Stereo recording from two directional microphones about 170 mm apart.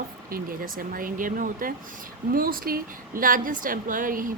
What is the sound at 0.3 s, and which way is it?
A woman's voice, 55° right (ahead or behind).